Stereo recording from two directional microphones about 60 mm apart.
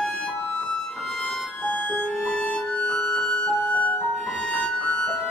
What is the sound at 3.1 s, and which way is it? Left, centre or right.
Music, centre.